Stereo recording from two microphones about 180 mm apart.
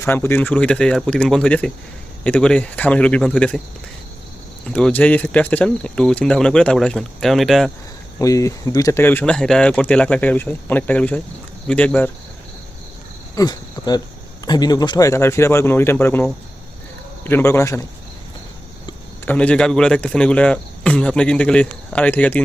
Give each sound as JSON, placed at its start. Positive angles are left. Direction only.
{"t": 0.0, "sound": "speech", "side_deg": 10}
{"t": 4.7, "sound": "speech", "side_deg": 10}
{"t": 8.2, "sound": "speech", "side_deg": 15}
{"t": 13.3, "sound": "speech", "side_deg": 20}
{"t": 19.2, "sound": "speech", "side_deg": 10}